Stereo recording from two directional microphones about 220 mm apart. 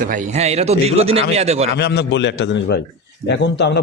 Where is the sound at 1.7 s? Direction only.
50° left (ahead or behind).